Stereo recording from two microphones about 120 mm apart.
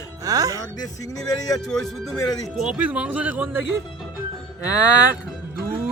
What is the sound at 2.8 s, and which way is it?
Speech, 15° right (ahead or behind).